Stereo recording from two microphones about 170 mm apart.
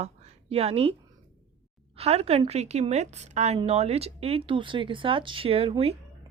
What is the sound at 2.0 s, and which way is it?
Speech, 35° right (ahead or behind).